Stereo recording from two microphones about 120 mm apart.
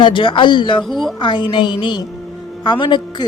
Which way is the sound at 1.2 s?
40° left (ahead or behind).